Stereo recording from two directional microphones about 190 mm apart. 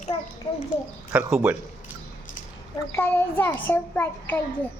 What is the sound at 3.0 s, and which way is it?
A child's voice, 10° left (ahead or behind).